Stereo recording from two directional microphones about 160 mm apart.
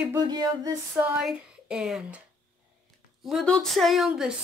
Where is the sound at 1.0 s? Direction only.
5° right (ahead or behind).